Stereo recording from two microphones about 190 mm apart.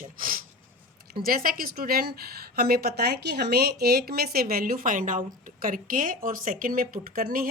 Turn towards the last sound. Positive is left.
turn(degrees=-50)  # may be behind; listen again after turning